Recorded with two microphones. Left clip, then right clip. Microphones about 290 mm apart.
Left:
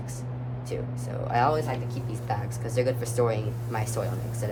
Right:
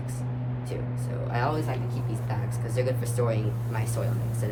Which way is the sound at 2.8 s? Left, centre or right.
Centre.